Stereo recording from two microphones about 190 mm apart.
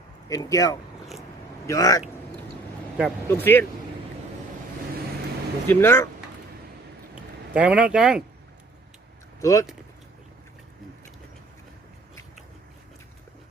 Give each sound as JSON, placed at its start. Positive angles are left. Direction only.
{"t": 0.3, "sound": "speech", "side_deg": 15}
{"t": 3.2, "sound": "speech", "side_deg": 10}
{"t": 5.6, "sound": "speech", "side_deg": 15}
{"t": 7.2, "sound": "speech", "side_deg": -5}
{"t": 9.4, "sound": "speech", "side_deg": 15}